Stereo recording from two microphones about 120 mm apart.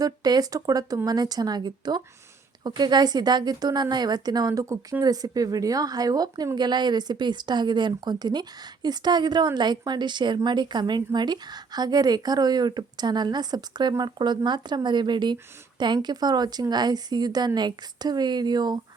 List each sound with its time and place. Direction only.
0.0 s speech: 35° right (ahead or behind)